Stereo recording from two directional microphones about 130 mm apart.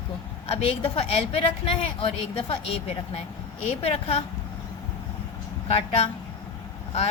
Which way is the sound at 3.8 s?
50° left (ahead or behind).